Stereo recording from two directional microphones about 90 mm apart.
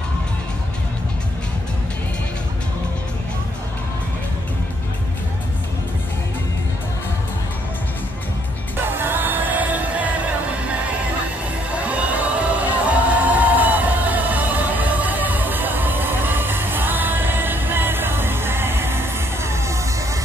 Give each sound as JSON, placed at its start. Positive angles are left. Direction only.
{"t": 8.8, "sound": "music", "side_deg": -25}